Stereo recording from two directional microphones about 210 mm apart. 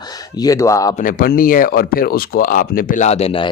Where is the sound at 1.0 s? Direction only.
40° left (ahead or behind).